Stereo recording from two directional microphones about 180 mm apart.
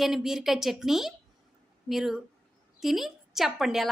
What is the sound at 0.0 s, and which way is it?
A woman's voice, centre (ahead or behind).